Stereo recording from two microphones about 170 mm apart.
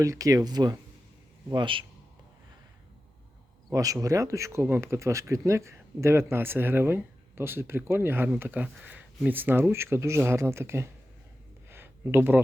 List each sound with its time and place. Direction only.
0.0 s speech: 20° right (ahead or behind)
3.7 s speech: 20° right (ahead or behind)
11.7 s a sound: 10° right (ahead or behind)